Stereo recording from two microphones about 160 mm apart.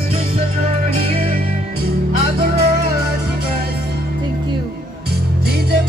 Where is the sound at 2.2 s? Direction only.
75° right (ahead or behind).